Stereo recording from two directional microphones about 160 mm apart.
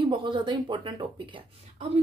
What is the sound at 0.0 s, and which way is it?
Speech, 30° right (ahead or behind).